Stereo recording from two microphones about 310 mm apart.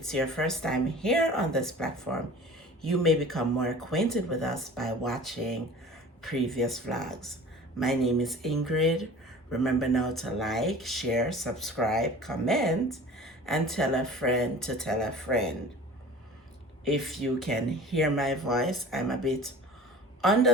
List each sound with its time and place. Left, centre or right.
0.0 s speech: centre
16.8 s speech: centre